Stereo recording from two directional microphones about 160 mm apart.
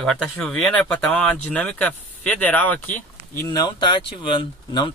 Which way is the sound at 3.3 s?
25° left (ahead or behind).